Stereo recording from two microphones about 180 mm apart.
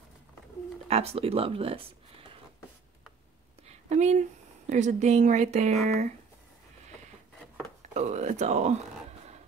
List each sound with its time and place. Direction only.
0.8 s speech: 35° right (ahead or behind)
3.6 s speech: 40° right (ahead or behind)
7.9 s speech: 40° right (ahead or behind)